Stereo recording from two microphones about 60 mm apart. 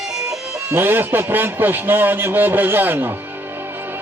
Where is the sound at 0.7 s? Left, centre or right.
Right.